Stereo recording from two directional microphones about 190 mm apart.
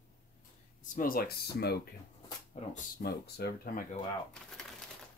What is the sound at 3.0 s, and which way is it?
Speech, 55° left (ahead or behind).